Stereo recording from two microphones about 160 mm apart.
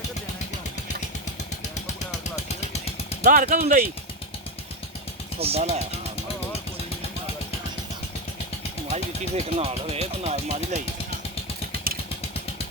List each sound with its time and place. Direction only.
2.3 s vehicle: 40° left (ahead or behind)
3.2 s speech: 55° right (ahead or behind)
5.4 s speech: 40° right (ahead or behind)
8.9 s speech: 40° right (ahead or behind)